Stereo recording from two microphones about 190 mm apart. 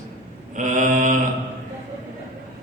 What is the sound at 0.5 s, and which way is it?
Mantra, 40° right (ahead or behind).